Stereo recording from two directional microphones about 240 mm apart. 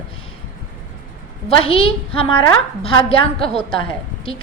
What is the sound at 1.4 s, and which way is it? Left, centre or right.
A woman's voice, left.